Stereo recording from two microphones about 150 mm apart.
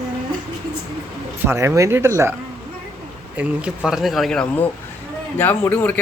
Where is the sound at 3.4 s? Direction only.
5° right (ahead or behind).